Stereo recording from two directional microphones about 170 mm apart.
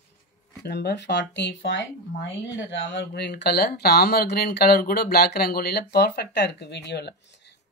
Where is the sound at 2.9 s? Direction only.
90° left.